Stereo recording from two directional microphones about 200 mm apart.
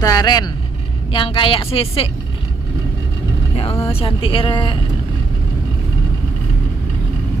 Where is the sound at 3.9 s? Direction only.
25° left (ahead or behind).